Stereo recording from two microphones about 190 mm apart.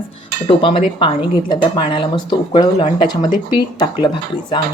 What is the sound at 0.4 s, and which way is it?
Speech, 30° left (ahead or behind).